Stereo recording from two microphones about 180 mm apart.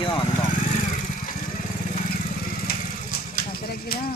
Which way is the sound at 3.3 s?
60° left (ahead or behind).